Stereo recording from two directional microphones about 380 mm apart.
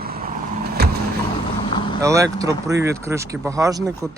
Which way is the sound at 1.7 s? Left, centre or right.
Centre.